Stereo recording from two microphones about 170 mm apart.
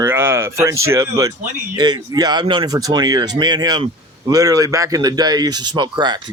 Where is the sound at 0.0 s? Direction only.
15° right (ahead or behind).